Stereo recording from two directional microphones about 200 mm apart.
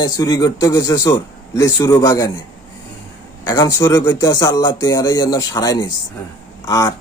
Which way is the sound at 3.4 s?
20° left (ahead or behind).